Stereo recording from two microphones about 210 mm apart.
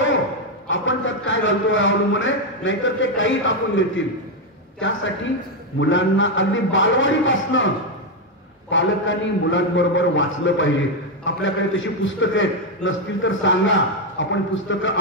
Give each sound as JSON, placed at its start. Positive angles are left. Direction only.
{"t": 0.7, "sound": "a man's voice", "side_deg": 65}